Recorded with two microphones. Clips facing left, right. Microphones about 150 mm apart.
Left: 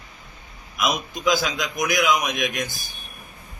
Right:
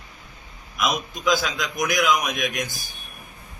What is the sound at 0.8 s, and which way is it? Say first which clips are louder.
A man's voice: left 1 dB; 5° left (ahead or behind).